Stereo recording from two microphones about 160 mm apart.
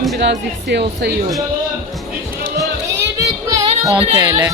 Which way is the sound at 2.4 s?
90° right.